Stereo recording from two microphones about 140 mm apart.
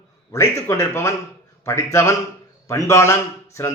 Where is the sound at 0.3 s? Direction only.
20° left (ahead or behind).